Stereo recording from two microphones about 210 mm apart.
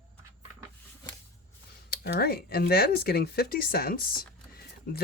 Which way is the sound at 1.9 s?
45° left (ahead or behind).